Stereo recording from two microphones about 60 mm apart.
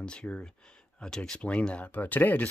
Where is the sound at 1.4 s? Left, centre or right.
Left.